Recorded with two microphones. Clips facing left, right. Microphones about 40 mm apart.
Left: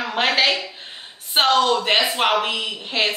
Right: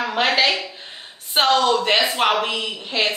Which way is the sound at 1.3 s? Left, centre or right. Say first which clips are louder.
Even; centre.